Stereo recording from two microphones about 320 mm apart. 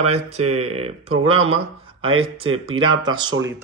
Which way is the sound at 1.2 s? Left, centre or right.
Centre.